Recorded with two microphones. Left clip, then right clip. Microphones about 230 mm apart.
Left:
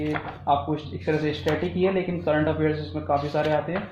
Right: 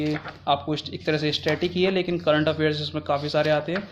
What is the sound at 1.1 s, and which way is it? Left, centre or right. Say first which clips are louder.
Speech: right 1 dB; right.